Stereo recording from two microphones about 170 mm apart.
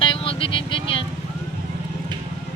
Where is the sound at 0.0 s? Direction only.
30° left (ahead or behind).